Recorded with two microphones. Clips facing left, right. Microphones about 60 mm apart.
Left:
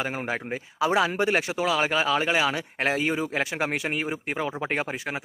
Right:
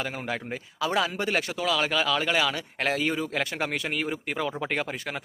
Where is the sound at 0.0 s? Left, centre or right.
Left; by 4.7 s centre.